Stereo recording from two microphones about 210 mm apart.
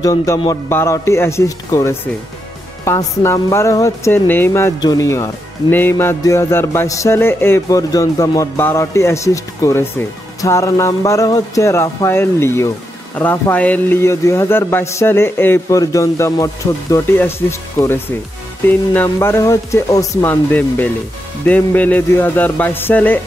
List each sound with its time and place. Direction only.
0.0 s speech: 15° left (ahead or behind)